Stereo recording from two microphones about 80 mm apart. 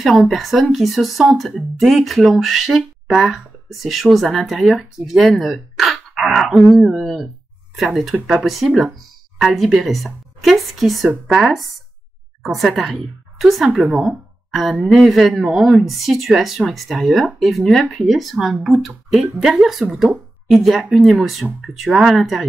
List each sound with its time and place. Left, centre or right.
0.0 s speech: centre
13.8 s speech: centre
14.5 s speech: centre